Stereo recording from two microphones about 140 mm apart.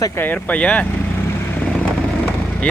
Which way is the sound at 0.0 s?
15° left (ahead or behind).